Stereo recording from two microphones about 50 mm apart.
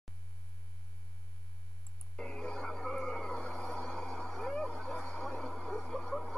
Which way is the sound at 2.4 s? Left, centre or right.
Centre.